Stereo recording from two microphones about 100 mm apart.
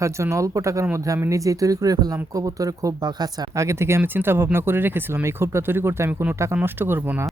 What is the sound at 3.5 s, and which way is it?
Speech, 30° right (ahead or behind).